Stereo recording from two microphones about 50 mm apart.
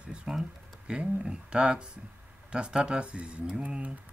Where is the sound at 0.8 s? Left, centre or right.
Centre.